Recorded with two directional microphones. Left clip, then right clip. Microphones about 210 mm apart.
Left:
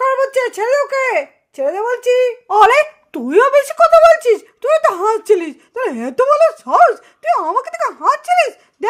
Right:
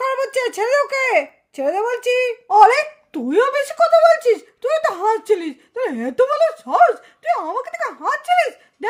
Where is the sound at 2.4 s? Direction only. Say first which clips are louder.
Even; 25° left (ahead or behind).